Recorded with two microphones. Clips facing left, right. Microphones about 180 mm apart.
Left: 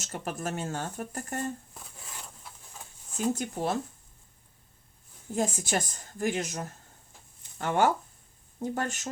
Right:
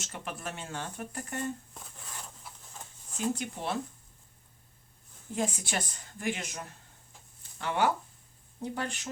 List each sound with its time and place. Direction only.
0.0 s speech: 40° left (ahead or behind)
1.7 s a sound: 5° left (ahead or behind)
3.3 s speech: 40° left (ahead or behind)
5.3 s speech: 45° left (ahead or behind)